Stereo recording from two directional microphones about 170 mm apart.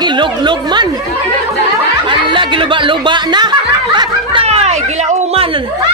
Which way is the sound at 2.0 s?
30° right (ahead or behind).